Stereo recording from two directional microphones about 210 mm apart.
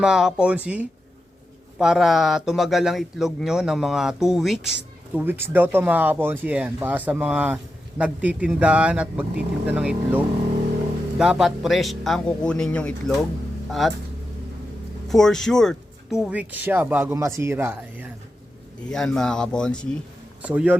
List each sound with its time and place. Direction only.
0.0 s speech: 5° right (ahead or behind)
15.1 s speech: centre (ahead or behind)
18.9 s speech: centre (ahead or behind)
20.4 s speech: 5° right (ahead or behind)